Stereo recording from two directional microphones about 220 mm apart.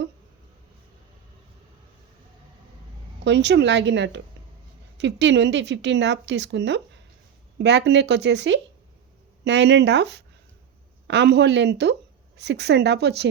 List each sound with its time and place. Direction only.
3.2 s speech: 50° right (ahead or behind)